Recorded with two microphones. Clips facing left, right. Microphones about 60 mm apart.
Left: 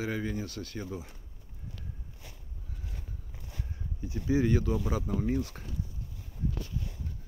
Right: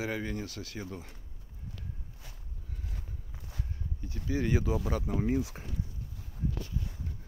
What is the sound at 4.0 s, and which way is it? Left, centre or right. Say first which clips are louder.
Speech: left 5 dB; centre.